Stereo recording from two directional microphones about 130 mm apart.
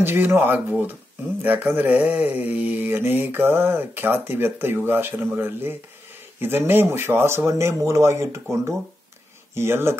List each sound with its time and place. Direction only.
0.0 s mantra: 15° right (ahead or behind)
6.4 s speech: 15° right (ahead or behind)